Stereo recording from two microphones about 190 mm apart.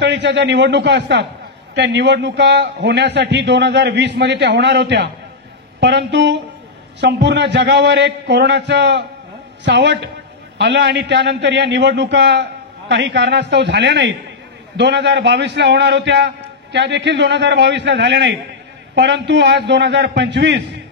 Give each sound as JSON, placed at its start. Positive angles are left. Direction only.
{"t": 0.0, "sound": "a man's voice", "side_deg": -65}